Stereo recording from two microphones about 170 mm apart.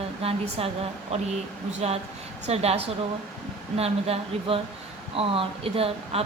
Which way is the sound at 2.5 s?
40° right (ahead or behind).